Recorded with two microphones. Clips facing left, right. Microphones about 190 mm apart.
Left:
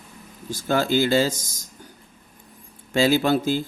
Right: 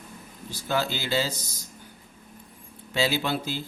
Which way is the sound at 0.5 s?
50° left (ahead or behind).